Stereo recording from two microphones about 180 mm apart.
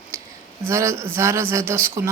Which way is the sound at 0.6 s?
15° right (ahead or behind).